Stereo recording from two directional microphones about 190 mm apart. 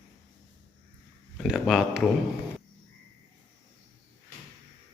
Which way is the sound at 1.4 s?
Centre (ahead or behind).